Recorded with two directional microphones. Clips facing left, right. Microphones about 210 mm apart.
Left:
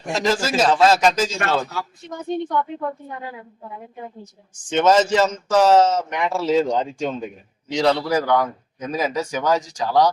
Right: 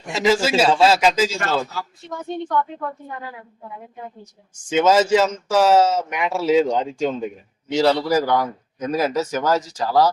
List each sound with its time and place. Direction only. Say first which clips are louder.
0.1 s speech: right 3 dB; 5° right (ahead or behind)
1.6 s speech: left 2 dB; 20° left (ahead or behind)
4.7 s speech: right 1 dB; 10° right (ahead or behind)